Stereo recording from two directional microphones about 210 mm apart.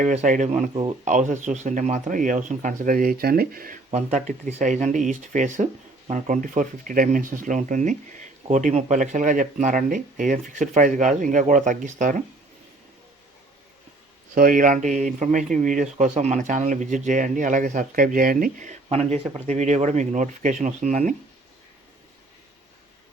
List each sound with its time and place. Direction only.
0.0 s speech: 35° right (ahead or behind)
0.7 s speech: 25° right (ahead or behind)
1.0 s speech: 35° right (ahead or behind)
14.3 s speech: 40° right (ahead or behind)